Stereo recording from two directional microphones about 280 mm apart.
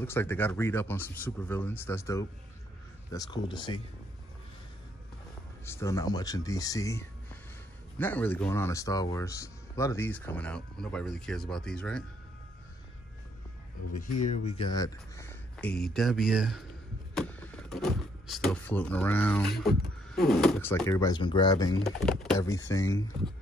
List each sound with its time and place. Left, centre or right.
0.0 s speech: centre
5.7 s speech: centre
14.0 s speech: left
14.6 s speech: centre
22.0 s speech: centre